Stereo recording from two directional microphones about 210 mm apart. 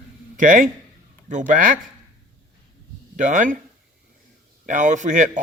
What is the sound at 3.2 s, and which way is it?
Speech, 35° right (ahead or behind).